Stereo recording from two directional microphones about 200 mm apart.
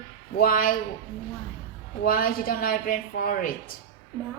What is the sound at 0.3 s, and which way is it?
Speech, 45° left (ahead or behind).